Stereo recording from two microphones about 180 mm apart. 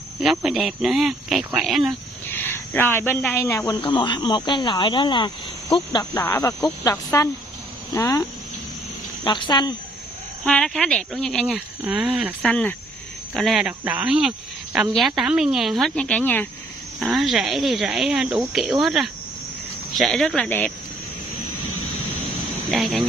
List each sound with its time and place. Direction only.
0.2 s speech: centre (ahead or behind)
2.2 s speech: 10° left (ahead or behind); by 6.0 s 30° left (ahead or behind)
6.1 s speech: 20° left (ahead or behind)
9.2 s speech: 25° left (ahead or behind)
10.4 s speech: 5° left (ahead or behind)
12.4 s speech: 5° left (ahead or behind)
22.7 s speech: centre (ahead or behind)